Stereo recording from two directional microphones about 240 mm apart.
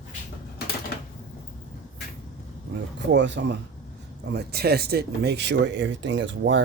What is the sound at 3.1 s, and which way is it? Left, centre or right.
Speech, right.